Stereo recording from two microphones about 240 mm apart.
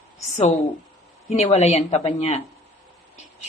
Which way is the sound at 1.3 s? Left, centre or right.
Left.